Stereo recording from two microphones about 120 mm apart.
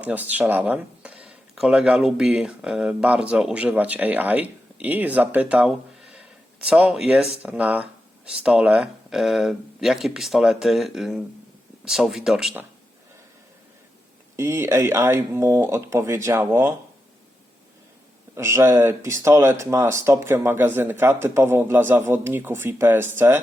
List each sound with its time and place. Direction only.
0.0 s speech: 15° right (ahead or behind)
14.3 s speech: 20° right (ahead or behind)
18.3 s speech: 20° right (ahead or behind)